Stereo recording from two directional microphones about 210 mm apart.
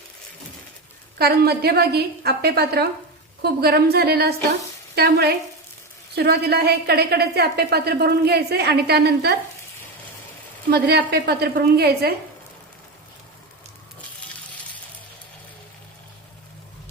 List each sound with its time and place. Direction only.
1.2 s a woman's voice: 50° right (ahead or behind)
10.7 s a woman's voice: 50° right (ahead or behind)